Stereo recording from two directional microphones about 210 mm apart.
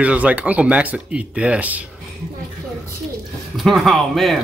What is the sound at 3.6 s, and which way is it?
Speech, centre (ahead or behind).